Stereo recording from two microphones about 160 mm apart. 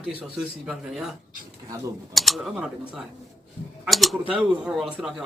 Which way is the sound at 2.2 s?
Centre (ahead or behind).